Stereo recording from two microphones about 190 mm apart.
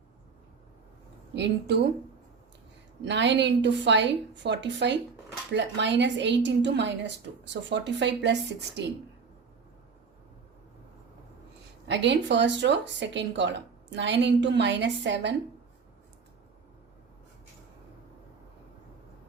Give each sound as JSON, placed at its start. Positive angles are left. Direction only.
{"t": 1.4, "sound": "speech", "side_deg": -60}
{"t": 3.0, "sound": "speech", "side_deg": -70}
{"t": 11.9, "sound": "speech", "side_deg": -65}